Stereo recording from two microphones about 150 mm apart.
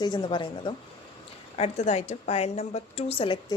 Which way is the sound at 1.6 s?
45° left (ahead or behind).